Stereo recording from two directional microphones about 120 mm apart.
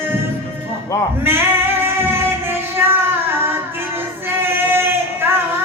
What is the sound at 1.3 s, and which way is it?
Music, 20° right (ahead or behind).